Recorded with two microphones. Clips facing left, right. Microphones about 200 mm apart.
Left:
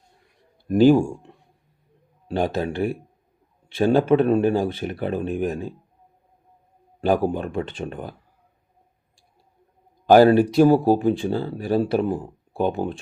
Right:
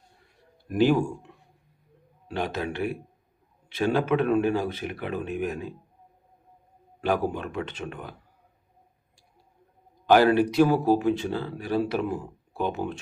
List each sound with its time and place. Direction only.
0.7 s speech: 30° left (ahead or behind)
2.2 s speech: 30° left (ahead or behind)
7.3 s speech: 30° left (ahead or behind)
10.1 s speech: 35° left (ahead or behind)